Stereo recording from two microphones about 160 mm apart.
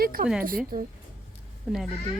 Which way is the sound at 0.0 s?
65° right (ahead or behind).